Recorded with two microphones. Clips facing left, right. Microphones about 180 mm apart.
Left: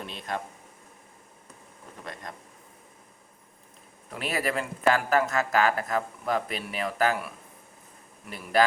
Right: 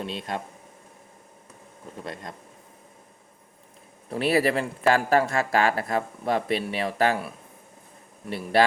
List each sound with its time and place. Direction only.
0.0 s speech: 30° right (ahead or behind)
4.1 s speech: 35° right (ahead or behind)